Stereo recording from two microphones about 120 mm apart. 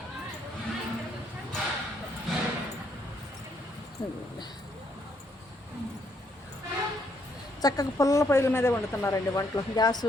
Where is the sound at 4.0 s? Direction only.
40° left (ahead or behind).